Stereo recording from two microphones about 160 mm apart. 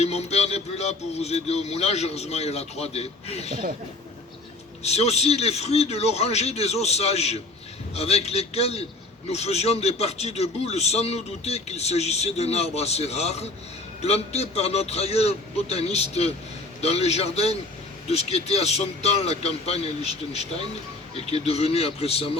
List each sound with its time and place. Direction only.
0.0 s a man's voice: 40° left (ahead or behind)
4.8 s a man's voice: 40° left (ahead or behind)